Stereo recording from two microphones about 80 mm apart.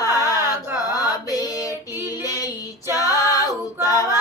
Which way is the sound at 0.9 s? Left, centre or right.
Left.